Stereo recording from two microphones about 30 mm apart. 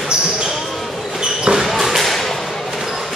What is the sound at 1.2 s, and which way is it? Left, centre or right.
Basketball bounce, right.